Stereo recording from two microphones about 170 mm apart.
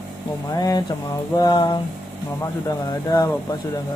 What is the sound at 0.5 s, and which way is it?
Speech, 20° left (ahead or behind).